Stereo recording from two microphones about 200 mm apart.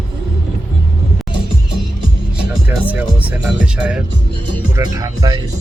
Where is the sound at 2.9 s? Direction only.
5° right (ahead or behind).